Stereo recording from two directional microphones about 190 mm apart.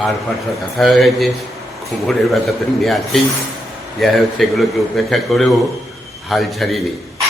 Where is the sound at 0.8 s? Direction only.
Centre (ahead or behind).